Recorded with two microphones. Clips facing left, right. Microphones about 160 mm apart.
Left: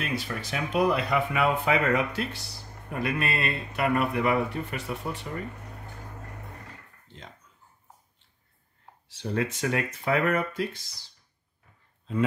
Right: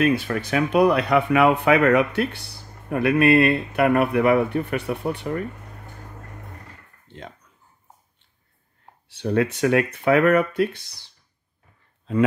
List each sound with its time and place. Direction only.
0.0 s speech: 55° right (ahead or behind)
9.1 s speech: 60° right (ahead or behind)